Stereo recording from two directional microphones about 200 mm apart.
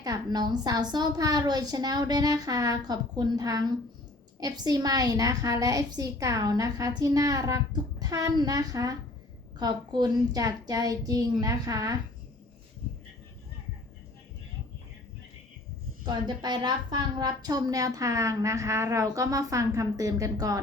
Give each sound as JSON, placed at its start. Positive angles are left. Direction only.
{"t": 0.0, "sound": "a woman's voice", "side_deg": -20}
{"t": 16.0, "sound": "a woman's voice", "side_deg": -20}